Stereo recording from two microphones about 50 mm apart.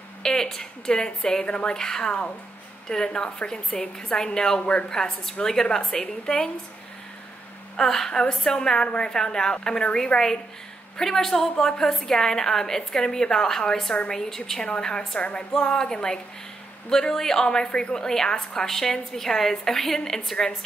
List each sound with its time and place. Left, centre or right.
0.2 s a woman's voice: centre
7.7 s a woman's voice: centre
17.9 s a woman's voice: centre